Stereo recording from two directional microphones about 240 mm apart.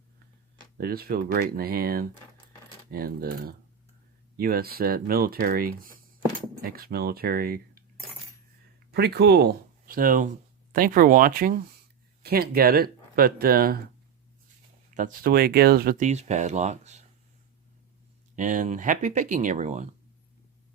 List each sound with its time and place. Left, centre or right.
0.6 s speech: right
8.9 s speech: right
14.8 s speech: right
18.3 s speech: right